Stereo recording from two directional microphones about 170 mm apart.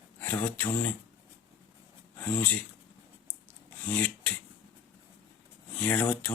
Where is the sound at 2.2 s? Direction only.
10° left (ahead or behind).